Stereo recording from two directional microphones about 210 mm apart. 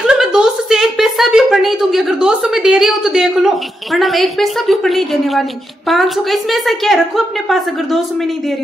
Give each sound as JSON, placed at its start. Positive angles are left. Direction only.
{"t": 0.0, "sound": "a woman's voice", "side_deg": -5}